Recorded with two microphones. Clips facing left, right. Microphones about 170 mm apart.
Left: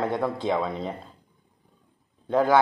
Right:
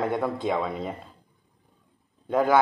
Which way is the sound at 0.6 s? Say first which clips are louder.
Left 1 dB; 5° right (ahead or behind).